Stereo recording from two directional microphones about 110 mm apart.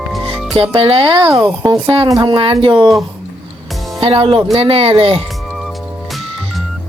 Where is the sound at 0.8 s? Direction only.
55° right (ahead or behind).